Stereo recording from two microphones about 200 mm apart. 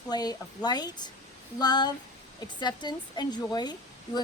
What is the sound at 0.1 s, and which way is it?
Speech, 20° left (ahead or behind).